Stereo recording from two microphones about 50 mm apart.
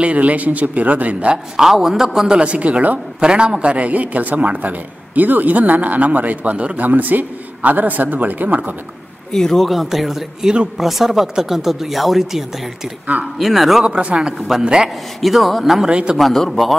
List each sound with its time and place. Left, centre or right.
0.0 s speech: right
1.6 s speech: centre
2.3 s speech: right
3.2 s a man's voice: centre
6.9 s a man's voice: right
9.3 s speech: centre
9.7 s speech: centre
13.8 s speech: right
15.1 s speech: centre
15.9 s speech: centre
16.2 s speech: centre